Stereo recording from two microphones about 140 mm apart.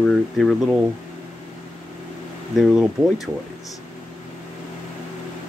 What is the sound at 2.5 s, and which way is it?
Speech, centre (ahead or behind).